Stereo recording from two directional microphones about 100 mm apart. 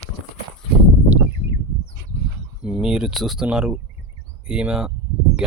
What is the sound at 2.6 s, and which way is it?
Speech, 10° right (ahead or behind).